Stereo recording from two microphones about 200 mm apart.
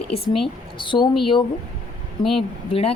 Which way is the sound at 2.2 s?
Centre (ahead or behind).